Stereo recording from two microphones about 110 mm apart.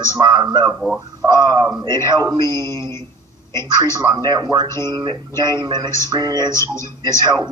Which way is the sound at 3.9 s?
40° right (ahead or behind).